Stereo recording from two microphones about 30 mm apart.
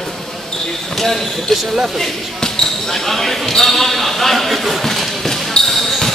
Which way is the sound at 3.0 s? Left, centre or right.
Centre.